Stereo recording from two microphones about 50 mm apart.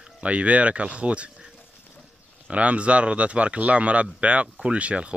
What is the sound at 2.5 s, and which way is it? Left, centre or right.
Speech, right.